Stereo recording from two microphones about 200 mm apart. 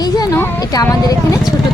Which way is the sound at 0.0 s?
15° left (ahead or behind).